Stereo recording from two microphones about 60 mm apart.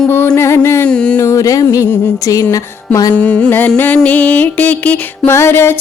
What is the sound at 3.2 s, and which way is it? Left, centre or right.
Music, left.